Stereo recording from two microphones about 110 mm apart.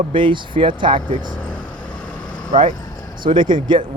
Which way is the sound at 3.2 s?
45° right (ahead or behind).